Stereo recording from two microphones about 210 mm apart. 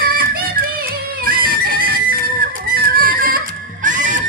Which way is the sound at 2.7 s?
45° right (ahead or behind).